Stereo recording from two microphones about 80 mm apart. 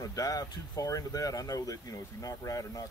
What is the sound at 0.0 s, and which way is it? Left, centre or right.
Speech, left.